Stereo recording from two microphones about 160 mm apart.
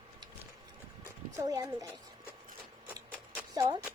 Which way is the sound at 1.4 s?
20° right (ahead or behind).